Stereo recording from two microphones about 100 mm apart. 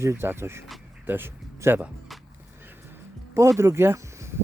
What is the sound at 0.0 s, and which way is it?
Speech, 25° right (ahead or behind).